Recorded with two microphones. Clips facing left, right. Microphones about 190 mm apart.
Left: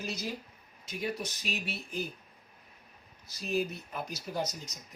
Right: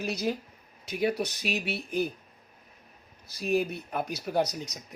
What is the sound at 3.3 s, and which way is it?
Speech, 60° right (ahead or behind).